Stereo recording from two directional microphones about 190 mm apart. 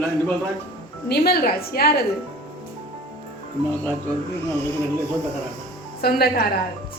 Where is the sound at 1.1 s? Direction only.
55° left (ahead or behind).